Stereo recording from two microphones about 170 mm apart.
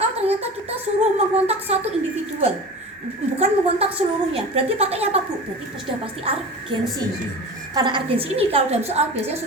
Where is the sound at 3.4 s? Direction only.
35° right (ahead or behind).